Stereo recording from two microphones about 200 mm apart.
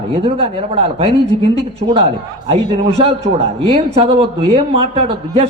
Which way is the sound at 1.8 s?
30° right (ahead or behind).